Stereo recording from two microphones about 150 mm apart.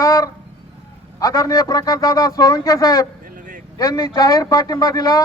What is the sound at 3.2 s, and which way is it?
Vehicle, 65° right (ahead or behind).